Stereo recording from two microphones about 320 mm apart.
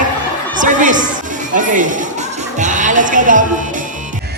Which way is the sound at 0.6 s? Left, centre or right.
Right.